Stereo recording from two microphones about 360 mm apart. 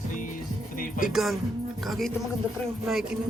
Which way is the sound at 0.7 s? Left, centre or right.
Left.